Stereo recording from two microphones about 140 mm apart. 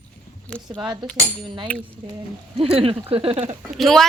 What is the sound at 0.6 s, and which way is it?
Speech, 5° right (ahead or behind).